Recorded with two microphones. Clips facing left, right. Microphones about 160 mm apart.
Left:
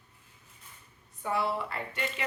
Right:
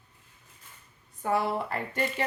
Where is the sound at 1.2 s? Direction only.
45° right (ahead or behind).